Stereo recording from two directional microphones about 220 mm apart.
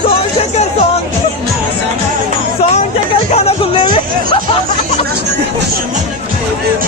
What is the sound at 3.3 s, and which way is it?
Music, 25° left (ahead or behind).